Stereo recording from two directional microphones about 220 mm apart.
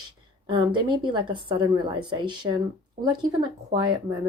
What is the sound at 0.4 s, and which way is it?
A woman's voice, 20° right (ahead or behind).